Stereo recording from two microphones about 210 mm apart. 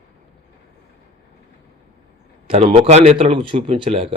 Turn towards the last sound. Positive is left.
turn(degrees=-25)  # may be behind; listen again after turning